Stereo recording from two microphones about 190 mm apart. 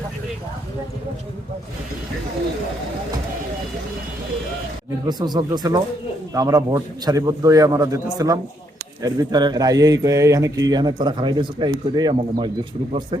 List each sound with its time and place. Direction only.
5.0 s speech: 20° right (ahead or behind)